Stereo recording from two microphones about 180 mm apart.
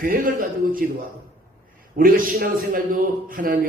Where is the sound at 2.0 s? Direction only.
50° right (ahead or behind).